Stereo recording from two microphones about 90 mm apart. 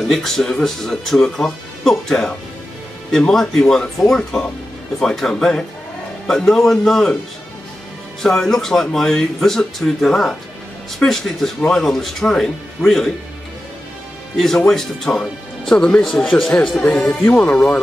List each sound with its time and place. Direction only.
0.1 s speech: 5° left (ahead or behind)
8.2 s speech: 5° left (ahead or behind)
14.3 s speech: 5° left (ahead or behind)